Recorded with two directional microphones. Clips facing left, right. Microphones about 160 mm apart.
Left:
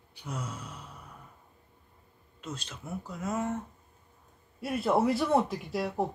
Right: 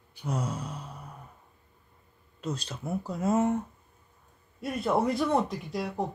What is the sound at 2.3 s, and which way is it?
Speech, 35° right (ahead or behind).